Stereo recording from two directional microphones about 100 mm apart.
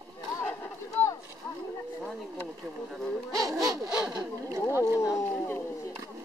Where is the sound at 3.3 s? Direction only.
35° right (ahead or behind).